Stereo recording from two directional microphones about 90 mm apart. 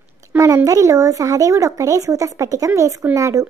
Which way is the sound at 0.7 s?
40° right (ahead or behind).